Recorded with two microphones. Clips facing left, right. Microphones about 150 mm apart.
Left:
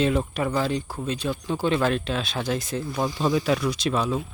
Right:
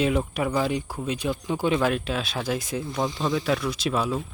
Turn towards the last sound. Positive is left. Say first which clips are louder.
# left 1 dB
turn(degrees=-5)  # may be behind; listen again after turning